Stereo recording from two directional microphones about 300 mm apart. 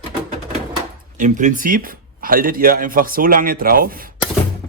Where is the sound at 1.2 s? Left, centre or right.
Right.